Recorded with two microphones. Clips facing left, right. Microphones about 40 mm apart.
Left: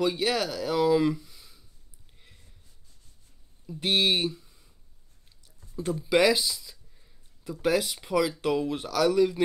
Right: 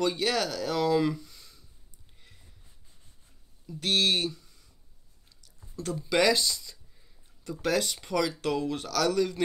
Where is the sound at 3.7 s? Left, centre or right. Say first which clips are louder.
Left 1 dB; centre.